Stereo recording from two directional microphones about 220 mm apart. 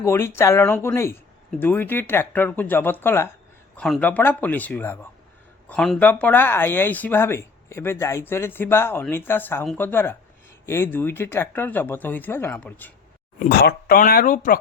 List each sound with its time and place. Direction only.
0.0 s speech: 10° left (ahead or behind)
13.4 s speech: 45° left (ahead or behind)